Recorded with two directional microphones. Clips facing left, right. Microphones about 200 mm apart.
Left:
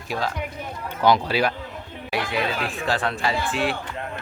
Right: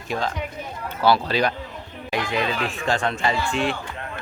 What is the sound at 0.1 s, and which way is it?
Speech, 5° left (ahead or behind).